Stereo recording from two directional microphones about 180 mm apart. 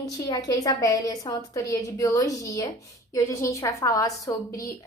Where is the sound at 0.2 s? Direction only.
15° left (ahead or behind).